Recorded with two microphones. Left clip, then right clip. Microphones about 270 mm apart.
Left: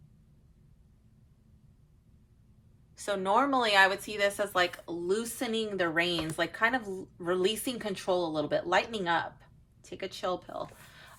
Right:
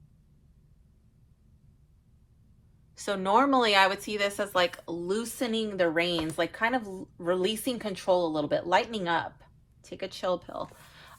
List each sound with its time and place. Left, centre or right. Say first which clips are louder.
2.9 s a woman's voice: right 2 dB; right